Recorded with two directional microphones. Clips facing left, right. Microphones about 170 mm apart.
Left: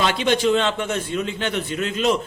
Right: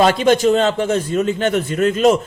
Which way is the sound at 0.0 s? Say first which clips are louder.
Right 6 dB; 45° right (ahead or behind).